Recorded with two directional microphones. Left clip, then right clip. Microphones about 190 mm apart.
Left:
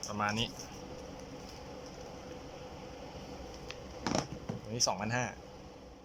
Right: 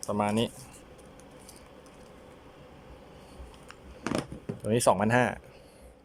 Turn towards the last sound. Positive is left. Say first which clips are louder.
# right 11 dB
turn(degrees=-45)  # may be behind; listen again after turning